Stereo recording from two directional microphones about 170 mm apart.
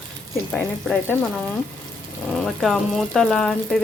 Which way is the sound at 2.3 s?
Centre (ahead or behind).